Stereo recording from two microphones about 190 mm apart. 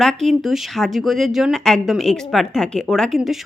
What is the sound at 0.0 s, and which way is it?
A woman's voice, centre (ahead or behind).